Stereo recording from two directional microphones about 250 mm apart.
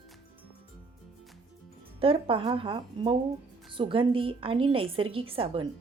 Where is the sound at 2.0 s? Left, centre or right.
Right.